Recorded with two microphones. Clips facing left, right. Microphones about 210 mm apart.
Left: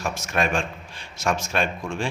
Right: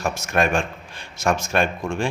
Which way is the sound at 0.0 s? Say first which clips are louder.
Right 4 dB; 50° right (ahead or behind).